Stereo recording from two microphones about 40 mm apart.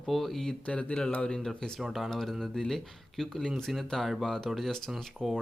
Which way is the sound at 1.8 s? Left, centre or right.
Centre.